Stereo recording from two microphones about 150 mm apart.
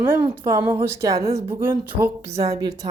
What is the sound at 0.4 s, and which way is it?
Speech, 20° right (ahead or behind).